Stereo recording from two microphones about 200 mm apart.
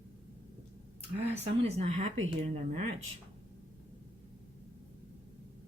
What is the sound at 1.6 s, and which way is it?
Speech, 35° right (ahead or behind).